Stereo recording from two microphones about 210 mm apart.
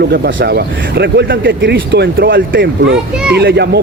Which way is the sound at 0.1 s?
50° right (ahead or behind).